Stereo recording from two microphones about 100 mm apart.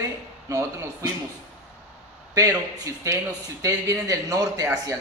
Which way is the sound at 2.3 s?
30° right (ahead or behind).